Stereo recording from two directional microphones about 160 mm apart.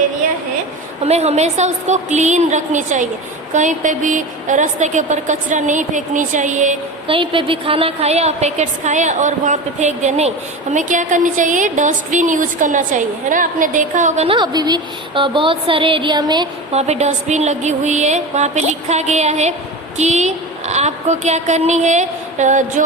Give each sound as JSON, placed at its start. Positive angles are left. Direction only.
{"t": 1.0, "sound": "a woman's voice", "side_deg": -45}
{"t": 7.1, "sound": "a woman's voice", "side_deg": -35}
{"t": 14.3, "sound": "a woman's voice", "side_deg": -30}
{"t": 16.7, "sound": "a woman's voice", "side_deg": -45}